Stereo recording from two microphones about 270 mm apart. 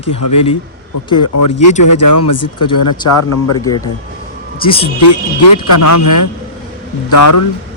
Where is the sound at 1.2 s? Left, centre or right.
Left.